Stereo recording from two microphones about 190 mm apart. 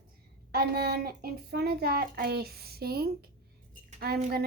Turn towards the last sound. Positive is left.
turn(degrees=-55)  # may be behind; listen again after turning